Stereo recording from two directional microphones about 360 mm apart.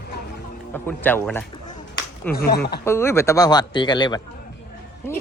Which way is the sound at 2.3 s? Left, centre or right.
Left.